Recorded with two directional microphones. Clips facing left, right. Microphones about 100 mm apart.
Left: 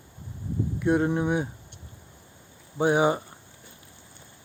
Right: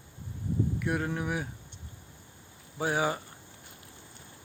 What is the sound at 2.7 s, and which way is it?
Speech, 20° left (ahead or behind).